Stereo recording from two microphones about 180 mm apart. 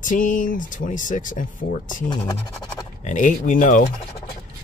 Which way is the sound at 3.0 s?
45° left (ahead or behind).